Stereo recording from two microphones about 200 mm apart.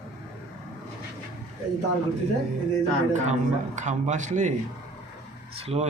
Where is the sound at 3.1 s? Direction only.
35° right (ahead or behind).